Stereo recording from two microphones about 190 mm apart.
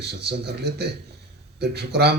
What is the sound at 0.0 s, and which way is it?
Speech, 60° right (ahead or behind).